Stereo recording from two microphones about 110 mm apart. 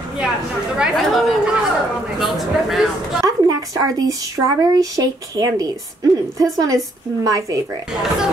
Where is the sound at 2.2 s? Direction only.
Centre (ahead or behind).